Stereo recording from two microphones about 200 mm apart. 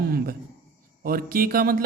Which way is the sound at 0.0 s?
50° right (ahead or behind).